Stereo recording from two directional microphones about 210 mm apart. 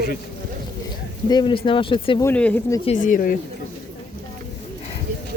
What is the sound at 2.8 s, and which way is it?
Speech, 35° left (ahead or behind).